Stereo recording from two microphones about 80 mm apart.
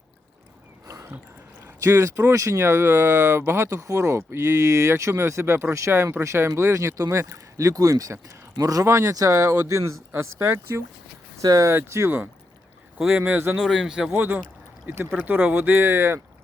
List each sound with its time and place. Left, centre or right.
1.6 s speech: right
10.1 s speech: right
11.3 s speech: right
11.7 s speech: right
13.0 s speech: centre
13.6 s speech: centre
14.1 s speech: right